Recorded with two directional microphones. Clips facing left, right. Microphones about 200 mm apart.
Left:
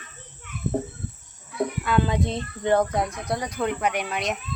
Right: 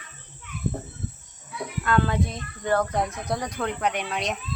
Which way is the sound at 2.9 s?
Centre (ahead or behind).